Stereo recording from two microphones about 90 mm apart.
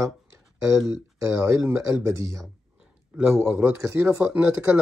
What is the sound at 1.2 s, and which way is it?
Speech, 30° right (ahead or behind).